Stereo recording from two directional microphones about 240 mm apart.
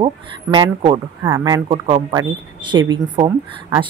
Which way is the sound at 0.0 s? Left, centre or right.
Right.